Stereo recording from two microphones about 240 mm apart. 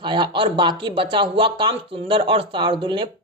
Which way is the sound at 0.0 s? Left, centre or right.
Centre.